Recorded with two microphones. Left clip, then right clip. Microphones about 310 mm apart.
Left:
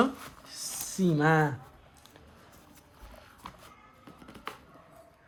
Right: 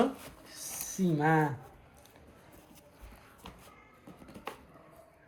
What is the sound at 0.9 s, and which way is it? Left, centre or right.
Speech, left.